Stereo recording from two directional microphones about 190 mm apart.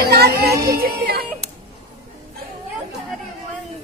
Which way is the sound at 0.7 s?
55° right (ahead or behind).